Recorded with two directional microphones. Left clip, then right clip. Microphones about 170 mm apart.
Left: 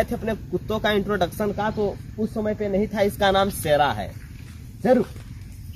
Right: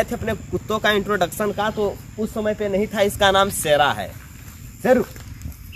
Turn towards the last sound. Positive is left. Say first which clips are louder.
# right 2 dB
turn(degrees=0)  # may be behind; listen again after turning